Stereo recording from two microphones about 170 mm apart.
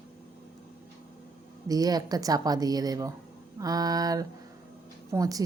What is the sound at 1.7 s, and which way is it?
A woman's voice, 20° right (ahead or behind).